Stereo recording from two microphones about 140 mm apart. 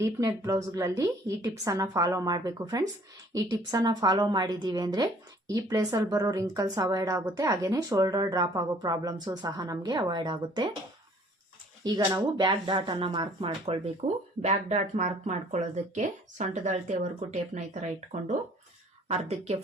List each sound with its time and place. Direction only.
0.0 s speech: 25° right (ahead or behind)
11.8 s speech: 25° right (ahead or behind); by 19.5 s 50° right (ahead or behind)